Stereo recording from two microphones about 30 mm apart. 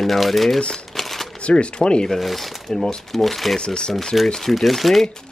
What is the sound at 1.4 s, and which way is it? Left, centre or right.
Speech, left.